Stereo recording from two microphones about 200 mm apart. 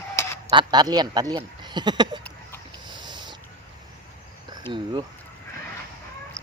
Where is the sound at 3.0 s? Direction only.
20° right (ahead or behind).